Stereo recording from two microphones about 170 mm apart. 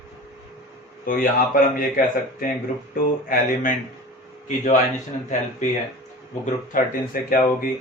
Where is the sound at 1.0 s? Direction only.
55° left (ahead or behind).